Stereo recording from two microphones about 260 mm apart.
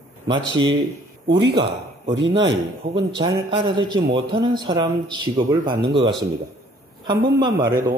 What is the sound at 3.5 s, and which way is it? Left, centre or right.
Speech, centre.